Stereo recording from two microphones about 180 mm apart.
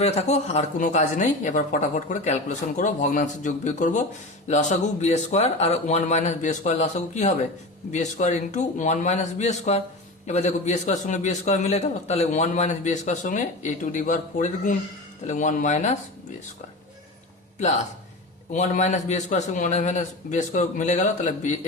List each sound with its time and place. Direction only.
0.0 s a man's voice: 35° left (ahead or behind)
18.5 s a man's voice: 40° left (ahead or behind)